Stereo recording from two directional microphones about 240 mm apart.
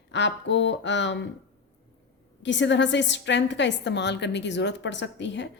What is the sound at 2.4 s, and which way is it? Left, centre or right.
A woman's voice, left.